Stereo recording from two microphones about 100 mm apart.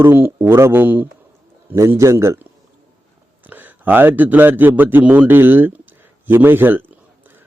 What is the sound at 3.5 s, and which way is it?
A man's voice, 20° right (ahead or behind).